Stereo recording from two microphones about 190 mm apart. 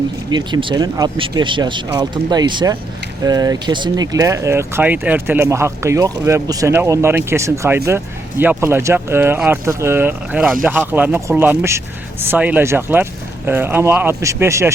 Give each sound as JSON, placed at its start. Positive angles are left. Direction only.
{"t": 0.3, "sound": "speech", "side_deg": -25}